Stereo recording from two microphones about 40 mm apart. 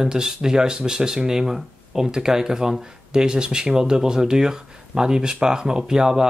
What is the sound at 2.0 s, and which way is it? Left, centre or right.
Speech, centre.